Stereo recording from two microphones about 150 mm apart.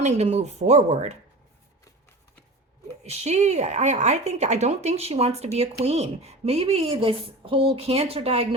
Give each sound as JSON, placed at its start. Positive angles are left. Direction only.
{"t": 0.0, "sound": "a woman's voice", "side_deg": -50}
{"t": 3.0, "sound": "a woman's voice", "side_deg": -50}